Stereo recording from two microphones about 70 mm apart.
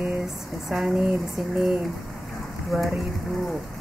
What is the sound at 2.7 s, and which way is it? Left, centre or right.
Speech, centre.